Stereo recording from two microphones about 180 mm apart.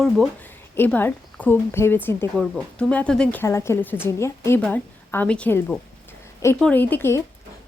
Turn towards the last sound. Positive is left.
turn(degrees=15)  # may be behind; listen again after turning